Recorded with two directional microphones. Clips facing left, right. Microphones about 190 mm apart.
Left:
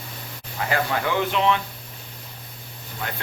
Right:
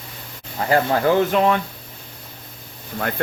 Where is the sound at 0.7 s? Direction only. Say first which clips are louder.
Right 7 dB; 40° right (ahead or behind).